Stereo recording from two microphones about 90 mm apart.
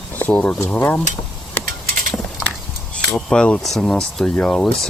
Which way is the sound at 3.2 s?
5° left (ahead or behind).